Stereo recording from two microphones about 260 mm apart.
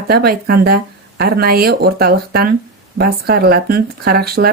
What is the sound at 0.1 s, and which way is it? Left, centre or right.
Speech, right.